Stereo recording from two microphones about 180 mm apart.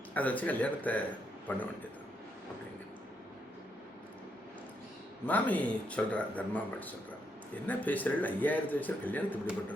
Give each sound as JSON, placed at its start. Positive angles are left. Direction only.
{"t": 0.1, "sound": "speech", "side_deg": 10}
{"t": 5.2, "sound": "speech", "side_deg": 10}